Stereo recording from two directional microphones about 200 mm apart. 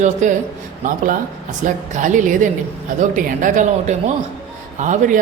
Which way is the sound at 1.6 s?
40° right (ahead or behind).